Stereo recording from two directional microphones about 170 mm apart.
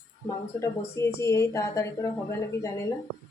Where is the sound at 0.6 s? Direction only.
15° left (ahead or behind).